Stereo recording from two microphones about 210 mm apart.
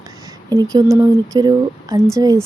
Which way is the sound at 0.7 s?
15° right (ahead or behind).